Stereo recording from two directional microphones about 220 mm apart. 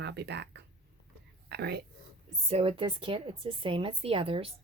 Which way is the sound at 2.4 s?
25° right (ahead or behind).